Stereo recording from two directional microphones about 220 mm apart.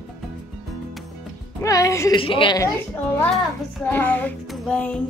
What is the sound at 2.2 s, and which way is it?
Speech, 25° left (ahead or behind).